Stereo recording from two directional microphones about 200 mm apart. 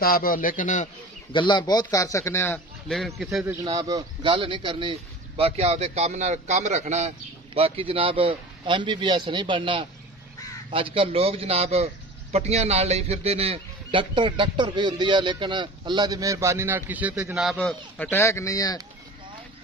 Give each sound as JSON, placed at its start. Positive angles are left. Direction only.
{"t": 0.0, "sound": "a man's voice", "side_deg": 45}
{"t": 1.3, "sound": "speech", "side_deg": 25}
{"t": 3.2, "sound": "a man's voice", "side_deg": 0}
{"t": 3.6, "sound": "a man's voice", "side_deg": -20}
{"t": 17.4, "sound": "speech", "side_deg": 0}